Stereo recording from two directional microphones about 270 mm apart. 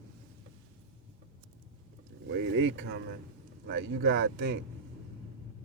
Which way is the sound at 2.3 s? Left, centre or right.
Right.